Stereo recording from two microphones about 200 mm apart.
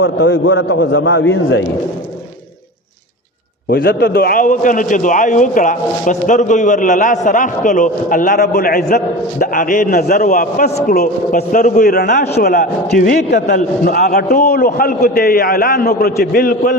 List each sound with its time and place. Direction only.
0.0 s a man's voice: 60° left (ahead or behind)
3.7 s a man's voice: 50° left (ahead or behind)